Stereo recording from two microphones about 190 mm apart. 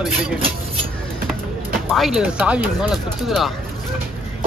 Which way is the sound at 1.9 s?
Centre (ahead or behind).